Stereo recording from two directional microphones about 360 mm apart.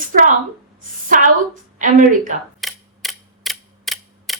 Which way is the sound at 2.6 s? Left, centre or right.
Centre.